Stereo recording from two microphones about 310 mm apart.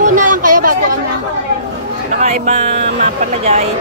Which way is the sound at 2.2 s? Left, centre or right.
Right.